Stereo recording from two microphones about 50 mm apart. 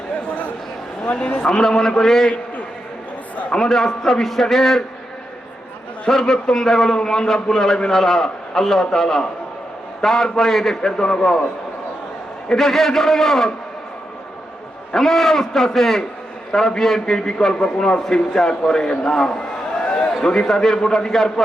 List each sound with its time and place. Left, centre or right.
0.3 s a sound: left
1.0 s a man's voice: left
1.5 s a man's voice: centre
3.5 s a man's voice: centre
6.1 s a man's voice: centre
12.5 s a man's voice: centre
14.9 s a man's voice: centre
19.8 s a sound: centre
20.2 s a man's voice: centre